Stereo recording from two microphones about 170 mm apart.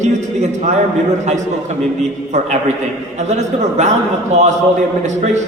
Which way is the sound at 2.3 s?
45° right (ahead or behind).